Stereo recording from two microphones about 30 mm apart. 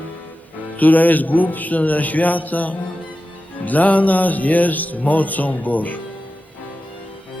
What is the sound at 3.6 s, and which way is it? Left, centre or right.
Music, left.